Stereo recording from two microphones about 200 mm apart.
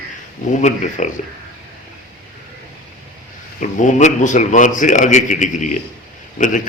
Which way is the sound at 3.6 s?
40° left (ahead or behind).